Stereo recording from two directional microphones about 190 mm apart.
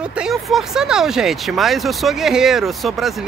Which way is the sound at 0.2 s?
Centre (ahead or behind).